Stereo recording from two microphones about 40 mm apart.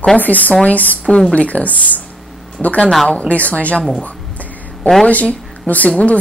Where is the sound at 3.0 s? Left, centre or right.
Left.